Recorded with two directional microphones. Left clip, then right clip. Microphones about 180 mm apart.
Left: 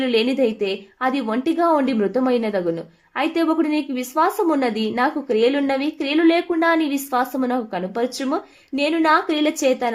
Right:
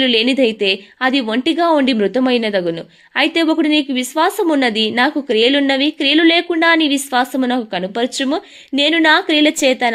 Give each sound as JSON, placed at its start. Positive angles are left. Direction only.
{"t": 0.0, "sound": "a woman's voice", "side_deg": -30}